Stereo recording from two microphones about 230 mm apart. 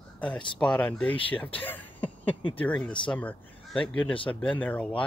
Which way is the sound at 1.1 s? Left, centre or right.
Left.